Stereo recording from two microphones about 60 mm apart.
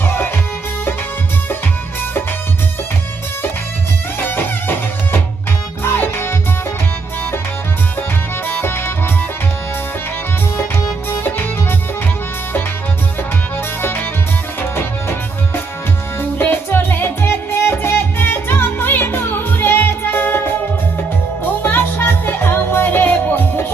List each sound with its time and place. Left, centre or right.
0.0 s music: left
4.2 s music: left
8.4 s music: left
11.1 s music: left
13.8 s music: left
16.4 s music: left
21.6 s music: left